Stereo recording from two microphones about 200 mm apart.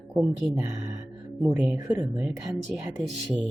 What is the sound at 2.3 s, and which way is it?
Speech, centre (ahead or behind).